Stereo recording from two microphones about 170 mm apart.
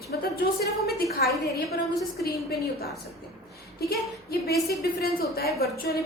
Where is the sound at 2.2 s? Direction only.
65° left (ahead or behind).